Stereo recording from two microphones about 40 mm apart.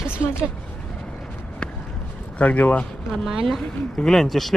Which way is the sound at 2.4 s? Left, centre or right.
Left.